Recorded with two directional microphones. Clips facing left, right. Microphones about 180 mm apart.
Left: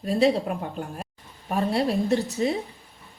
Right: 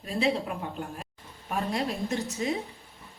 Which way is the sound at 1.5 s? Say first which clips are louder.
Left 6 dB; 35° left (ahead or behind).